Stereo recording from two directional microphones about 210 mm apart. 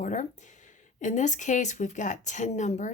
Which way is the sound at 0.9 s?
35° left (ahead or behind).